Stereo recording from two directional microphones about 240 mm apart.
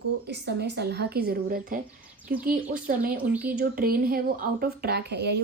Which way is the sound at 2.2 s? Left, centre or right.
Centre.